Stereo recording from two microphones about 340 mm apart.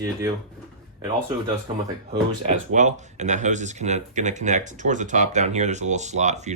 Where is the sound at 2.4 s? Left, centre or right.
Right.